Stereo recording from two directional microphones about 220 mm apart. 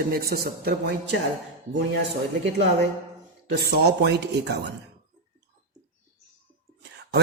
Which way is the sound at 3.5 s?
45° right (ahead or behind).